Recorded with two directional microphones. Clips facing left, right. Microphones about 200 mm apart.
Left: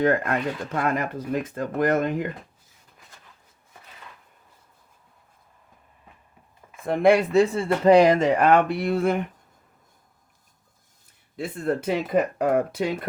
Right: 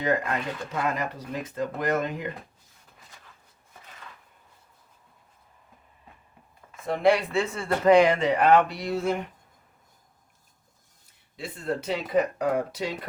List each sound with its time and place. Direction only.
0.0 s speech: 55° left (ahead or behind)
6.8 s speech: 50° left (ahead or behind)
7.5 s speech: 30° left (ahead or behind); by 9.2 s 55° left (ahead or behind)
11.3 s speech: 55° left (ahead or behind)